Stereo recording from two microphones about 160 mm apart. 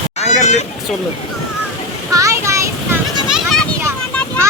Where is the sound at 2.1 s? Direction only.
20° right (ahead or behind).